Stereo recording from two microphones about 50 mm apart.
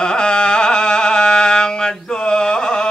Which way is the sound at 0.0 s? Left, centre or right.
Centre.